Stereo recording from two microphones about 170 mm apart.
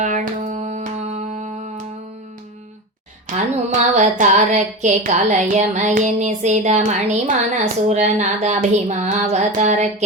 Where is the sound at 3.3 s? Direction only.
45° right (ahead or behind).